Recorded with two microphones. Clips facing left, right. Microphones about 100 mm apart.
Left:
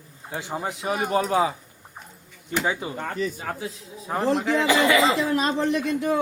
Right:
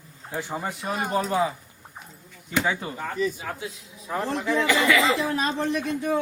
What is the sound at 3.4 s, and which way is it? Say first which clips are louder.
Speech: left 2 dB; 35° left (ahead or behind).